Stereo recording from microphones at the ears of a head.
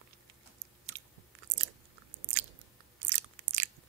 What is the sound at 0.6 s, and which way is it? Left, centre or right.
Biting, right.